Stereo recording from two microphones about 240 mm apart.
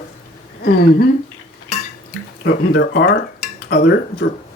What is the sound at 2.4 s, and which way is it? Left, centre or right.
Speech, left.